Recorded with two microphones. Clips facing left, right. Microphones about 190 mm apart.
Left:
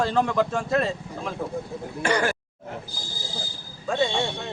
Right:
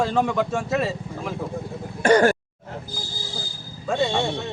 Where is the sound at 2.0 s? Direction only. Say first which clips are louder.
Right 8 dB; 50° right (ahead or behind).